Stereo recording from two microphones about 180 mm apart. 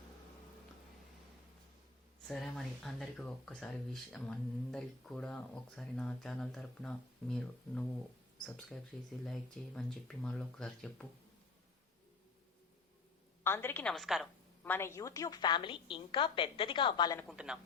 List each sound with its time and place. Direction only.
2.2 s speech: centre (ahead or behind)
9.2 s speech: centre (ahead or behind)
13.4 s a woman's voice: 10° left (ahead or behind)
14.6 s a woman's voice: 10° left (ahead or behind)
17.2 s speech: 5° right (ahead or behind)